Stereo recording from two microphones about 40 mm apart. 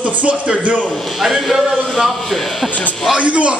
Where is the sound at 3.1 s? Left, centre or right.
Right.